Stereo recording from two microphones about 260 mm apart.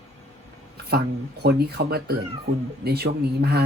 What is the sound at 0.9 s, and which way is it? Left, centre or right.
Speech, right.